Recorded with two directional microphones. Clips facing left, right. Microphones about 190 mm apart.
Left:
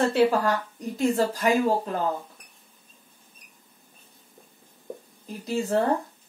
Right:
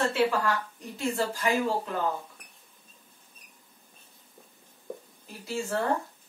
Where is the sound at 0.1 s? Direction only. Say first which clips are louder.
Left 5 dB; 40° left (ahead or behind).